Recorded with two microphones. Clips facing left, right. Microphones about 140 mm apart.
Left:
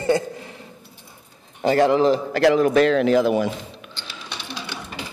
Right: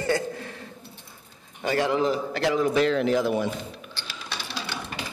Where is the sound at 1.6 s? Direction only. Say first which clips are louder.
Left 8 dB; 40° left (ahead or behind).